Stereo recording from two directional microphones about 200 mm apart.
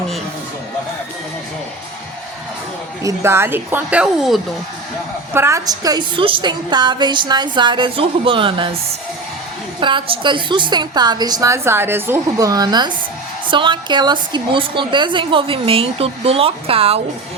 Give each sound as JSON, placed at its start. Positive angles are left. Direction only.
{"t": 3.0, "sound": "a woman's voice", "side_deg": -15}
{"t": 5.3, "sound": "a woman's voice", "side_deg": -15}
{"t": 9.8, "sound": "a woman's voice", "side_deg": -25}